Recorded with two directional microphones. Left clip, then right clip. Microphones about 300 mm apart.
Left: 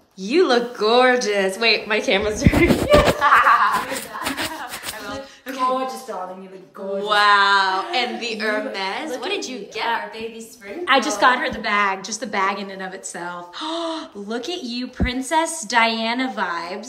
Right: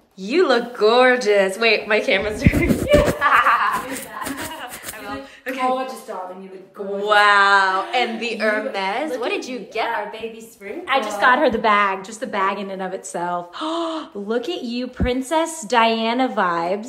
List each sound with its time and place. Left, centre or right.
0.2 s speech: centre
7.0 s a woman's voice: centre
10.9 s a woman's voice: left
11.4 s a woman's voice: centre